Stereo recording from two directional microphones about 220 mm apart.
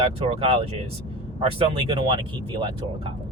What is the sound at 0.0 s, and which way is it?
Speech, 25° right (ahead or behind).